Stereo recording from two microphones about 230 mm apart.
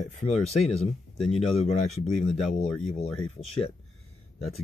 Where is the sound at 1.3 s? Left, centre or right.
Left.